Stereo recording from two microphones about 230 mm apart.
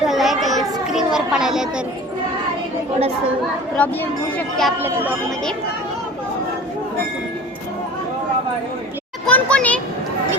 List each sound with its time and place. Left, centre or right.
0.0 s a sound: centre
3.8 s speech: centre
4.8 s speech: centre
9.2 s a child's voice: centre